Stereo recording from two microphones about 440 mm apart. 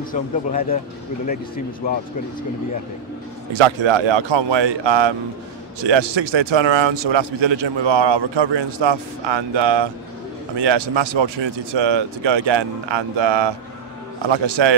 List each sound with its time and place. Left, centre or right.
0.1 s speech: centre
3.8 s a man's voice: right